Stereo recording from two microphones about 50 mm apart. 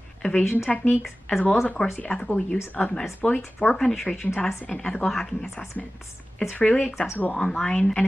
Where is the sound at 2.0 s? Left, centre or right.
Left.